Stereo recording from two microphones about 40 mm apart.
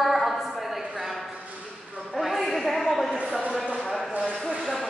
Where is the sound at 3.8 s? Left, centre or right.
Centre.